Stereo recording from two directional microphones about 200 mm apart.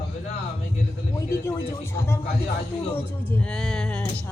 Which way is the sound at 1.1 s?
10° left (ahead or behind).